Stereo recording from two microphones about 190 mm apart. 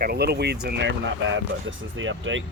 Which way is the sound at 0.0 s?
55° right (ahead or behind).